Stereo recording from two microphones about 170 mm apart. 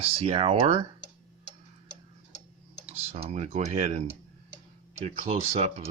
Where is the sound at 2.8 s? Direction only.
35° right (ahead or behind).